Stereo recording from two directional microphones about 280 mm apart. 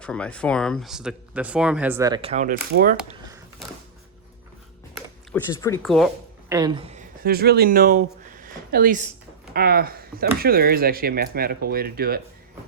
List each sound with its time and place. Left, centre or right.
0.0 s speech: centre; by 3.0 s right
3.0 s a sound: centre
5.3 s speech: centre
6.5 s speech: centre; by 12.2 s right